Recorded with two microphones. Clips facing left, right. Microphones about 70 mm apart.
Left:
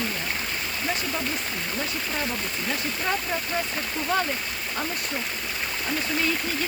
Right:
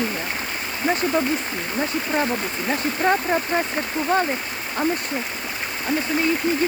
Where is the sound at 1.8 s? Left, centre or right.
Right.